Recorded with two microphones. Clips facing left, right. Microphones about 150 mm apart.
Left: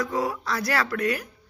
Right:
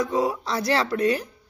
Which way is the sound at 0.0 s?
20° right (ahead or behind).